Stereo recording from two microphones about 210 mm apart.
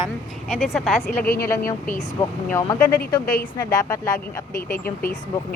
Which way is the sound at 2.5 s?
10° left (ahead or behind).